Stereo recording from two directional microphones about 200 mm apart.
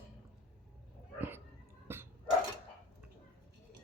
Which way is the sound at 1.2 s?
10° right (ahead or behind).